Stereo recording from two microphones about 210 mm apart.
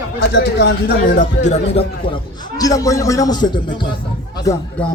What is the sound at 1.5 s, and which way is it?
A man's voice, 25° left (ahead or behind).